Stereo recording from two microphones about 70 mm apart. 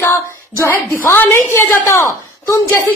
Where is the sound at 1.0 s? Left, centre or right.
Left.